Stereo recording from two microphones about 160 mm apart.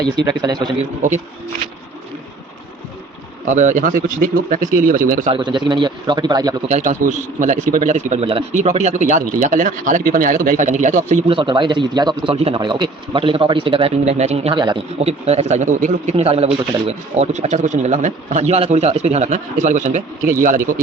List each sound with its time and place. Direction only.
0.4 s a man's voice: 25° right (ahead or behind)
0.8 s a man's voice: 45° right (ahead or behind)
3.4 s speech: 50° right (ahead or behind)
5.3 s a man's voice: 30° right (ahead or behind)
6.7 s a man's voice: 50° right (ahead or behind)
11.3 s a man's voice: 30° right (ahead or behind); by 20.0 s 50° right (ahead or behind)